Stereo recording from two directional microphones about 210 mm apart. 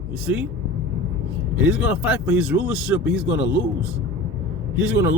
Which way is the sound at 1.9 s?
5° right (ahead or behind).